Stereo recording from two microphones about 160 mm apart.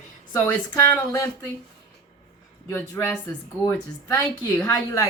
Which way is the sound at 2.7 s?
15° left (ahead or behind).